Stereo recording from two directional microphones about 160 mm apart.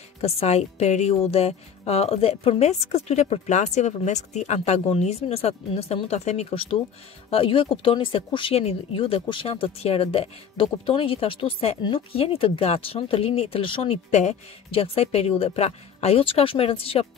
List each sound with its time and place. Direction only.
0.2 s speech: 40° left (ahead or behind)